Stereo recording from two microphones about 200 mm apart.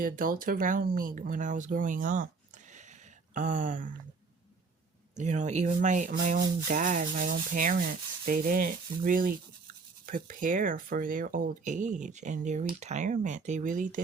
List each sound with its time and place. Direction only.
0.0 s sanding: 45° right (ahead or behind)
3.3 s speech: 40° right (ahead or behind)
5.1 s speech: 35° right (ahead or behind)
6.1 s sanding: 50° right (ahead or behind)
10.1 s speech: 40° right (ahead or behind)